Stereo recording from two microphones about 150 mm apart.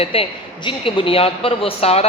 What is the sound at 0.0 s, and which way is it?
A man's voice, 40° left (ahead or behind).